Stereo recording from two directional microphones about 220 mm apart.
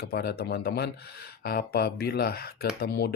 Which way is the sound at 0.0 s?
45° left (ahead or behind).